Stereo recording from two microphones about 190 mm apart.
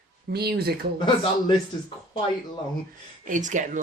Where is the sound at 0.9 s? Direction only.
25° left (ahead or behind).